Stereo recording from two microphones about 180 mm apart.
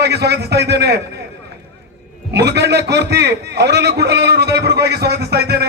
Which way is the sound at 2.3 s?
65° right (ahead or behind).